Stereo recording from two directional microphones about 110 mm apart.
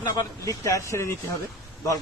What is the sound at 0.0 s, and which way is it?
Speech, 30° left (ahead or behind).